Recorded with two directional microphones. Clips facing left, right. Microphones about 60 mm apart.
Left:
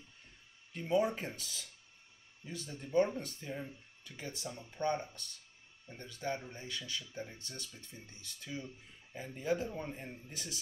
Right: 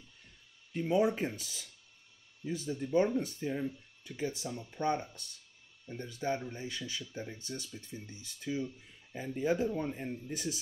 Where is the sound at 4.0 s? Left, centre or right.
Centre.